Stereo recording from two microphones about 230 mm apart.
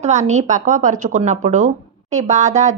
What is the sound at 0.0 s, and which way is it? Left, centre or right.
Speech, right.